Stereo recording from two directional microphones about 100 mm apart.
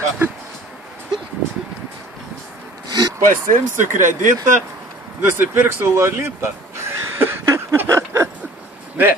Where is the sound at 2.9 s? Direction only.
45° right (ahead or behind).